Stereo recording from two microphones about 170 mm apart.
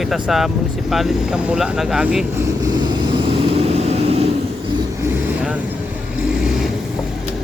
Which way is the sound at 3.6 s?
40° right (ahead or behind).